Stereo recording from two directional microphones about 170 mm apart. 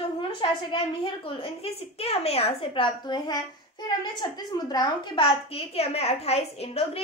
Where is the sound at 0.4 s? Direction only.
30° left (ahead or behind).